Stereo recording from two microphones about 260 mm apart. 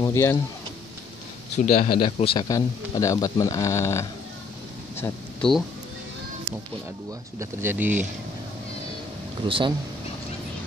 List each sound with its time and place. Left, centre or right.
0.0 s speech: centre
1.8 s a man's voice: centre
7.3 s speech: centre
9.5 s speech: centre